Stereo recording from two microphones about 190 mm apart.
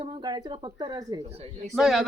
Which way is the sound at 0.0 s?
25° right (ahead or behind).